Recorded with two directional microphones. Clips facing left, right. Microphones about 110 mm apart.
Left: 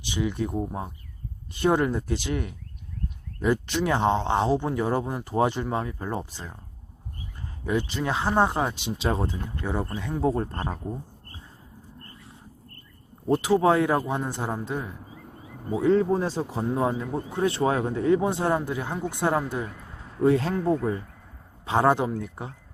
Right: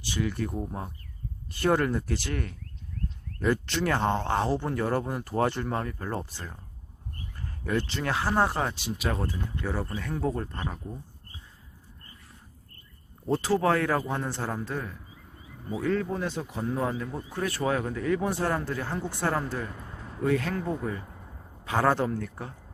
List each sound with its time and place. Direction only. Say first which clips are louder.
0.0 s speech: left 3 dB; 20° left (ahead or behind)
10.2 s speech: left 7 dB; 30° left (ahead or behind)
13.2 s speech: left 4 dB; 15° left (ahead or behind)
15.1 s a sound: left 7 dB; 50° left (ahead or behind)
15.8 s speech: left 7 dB; 25° left (ahead or behind)
19.7 s a sound: right 1 dB; centre (ahead or behind)
20.2 s speech: left 6 dB; 30° left (ahead or behind)